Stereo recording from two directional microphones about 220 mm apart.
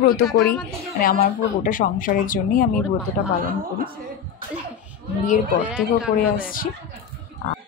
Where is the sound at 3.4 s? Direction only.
40° right (ahead or behind).